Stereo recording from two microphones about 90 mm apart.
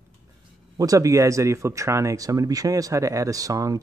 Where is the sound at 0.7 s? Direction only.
40° right (ahead or behind).